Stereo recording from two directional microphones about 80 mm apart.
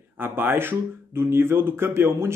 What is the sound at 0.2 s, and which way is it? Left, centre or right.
Speech, right.